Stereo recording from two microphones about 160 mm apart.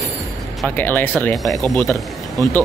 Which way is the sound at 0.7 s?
10° left (ahead or behind).